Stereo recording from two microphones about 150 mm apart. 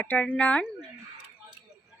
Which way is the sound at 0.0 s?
10° left (ahead or behind).